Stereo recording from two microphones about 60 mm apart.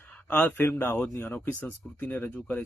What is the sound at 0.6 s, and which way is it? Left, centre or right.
Speech, left.